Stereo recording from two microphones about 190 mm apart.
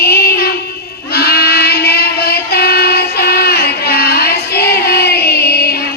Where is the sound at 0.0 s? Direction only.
55° left (ahead or behind).